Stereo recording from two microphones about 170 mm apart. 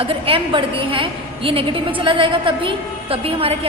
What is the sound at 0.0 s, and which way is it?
A woman's voice, 35° right (ahead or behind).